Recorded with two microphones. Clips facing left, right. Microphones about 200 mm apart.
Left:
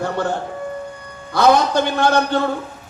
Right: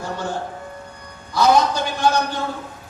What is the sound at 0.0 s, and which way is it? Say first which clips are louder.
Speech: left 5 dB; 60° left (ahead or behind).